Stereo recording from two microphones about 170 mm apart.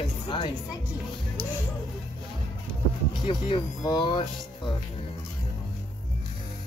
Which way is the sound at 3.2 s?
35° left (ahead or behind).